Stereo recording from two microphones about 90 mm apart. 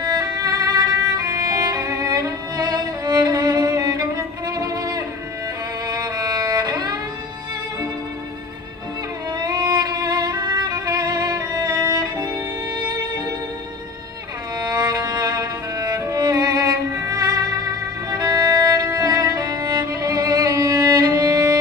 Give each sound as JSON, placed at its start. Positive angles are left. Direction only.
{"t": 0.0, "sound": "violin", "side_deg": -45}
{"t": 5.9, "sound": "music", "side_deg": -45}
{"t": 9.4, "sound": "music", "side_deg": -45}
{"t": 14.6, "sound": "music", "side_deg": -45}
{"t": 18.1, "sound": "violin", "side_deg": -40}